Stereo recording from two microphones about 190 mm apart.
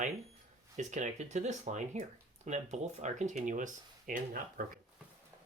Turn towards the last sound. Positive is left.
turn(degrees=-50)  # may be behind; listen again after turning